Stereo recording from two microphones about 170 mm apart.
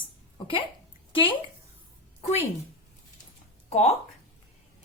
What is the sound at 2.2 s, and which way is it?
Speech, 40° left (ahead or behind).